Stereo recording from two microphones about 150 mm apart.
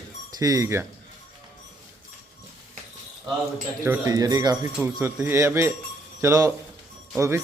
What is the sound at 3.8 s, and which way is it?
Speech, 20° right (ahead or behind).